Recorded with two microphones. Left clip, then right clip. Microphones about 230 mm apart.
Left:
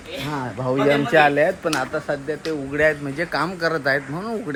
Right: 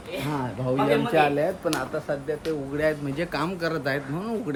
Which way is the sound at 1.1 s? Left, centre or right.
Left.